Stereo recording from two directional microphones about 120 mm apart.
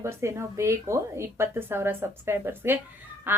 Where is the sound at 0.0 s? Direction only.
25° right (ahead or behind).